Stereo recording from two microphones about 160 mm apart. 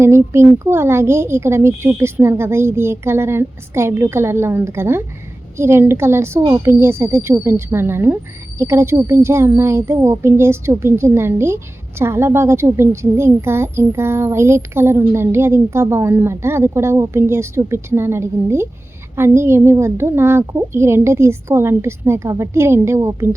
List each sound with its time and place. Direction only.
0.0 s a woman's voice: 15° right (ahead or behind)